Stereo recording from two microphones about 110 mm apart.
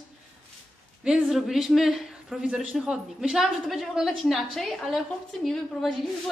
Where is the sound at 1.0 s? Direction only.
5° right (ahead or behind).